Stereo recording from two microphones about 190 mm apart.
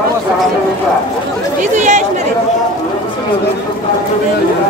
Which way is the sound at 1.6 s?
40° right (ahead or behind).